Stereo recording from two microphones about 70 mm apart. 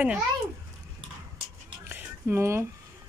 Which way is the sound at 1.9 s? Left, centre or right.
Right.